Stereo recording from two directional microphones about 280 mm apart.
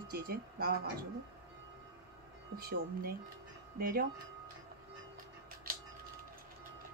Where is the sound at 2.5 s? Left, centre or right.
Right.